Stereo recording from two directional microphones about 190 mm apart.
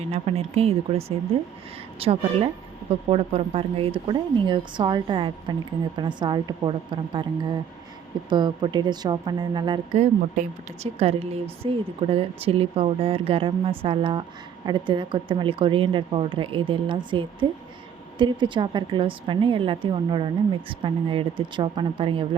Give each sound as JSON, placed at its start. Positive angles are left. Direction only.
{"t": 0.1, "sound": "a woman's voice", "side_deg": -35}
{"t": 10.4, "sound": "a woman's voice", "side_deg": -40}